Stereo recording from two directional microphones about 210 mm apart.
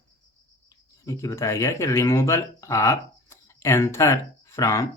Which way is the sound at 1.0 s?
15° left (ahead or behind).